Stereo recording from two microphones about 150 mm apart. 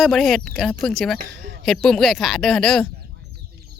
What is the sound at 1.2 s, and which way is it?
Speech, 85° right.